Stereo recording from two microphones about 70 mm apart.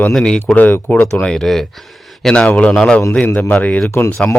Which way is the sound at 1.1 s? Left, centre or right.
Centre.